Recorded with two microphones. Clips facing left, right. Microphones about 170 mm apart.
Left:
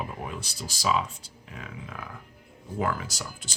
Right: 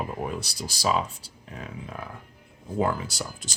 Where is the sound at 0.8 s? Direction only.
35° right (ahead or behind).